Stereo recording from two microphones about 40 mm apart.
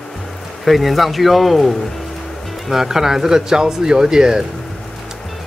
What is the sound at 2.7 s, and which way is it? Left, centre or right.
Speech, centre.